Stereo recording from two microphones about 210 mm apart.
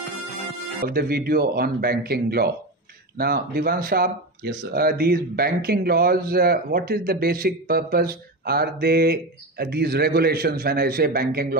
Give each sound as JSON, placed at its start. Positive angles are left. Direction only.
{"t": 0.8, "sound": "speech", "side_deg": -45}